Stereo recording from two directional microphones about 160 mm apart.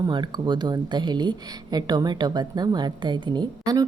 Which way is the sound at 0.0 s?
25° right (ahead or behind).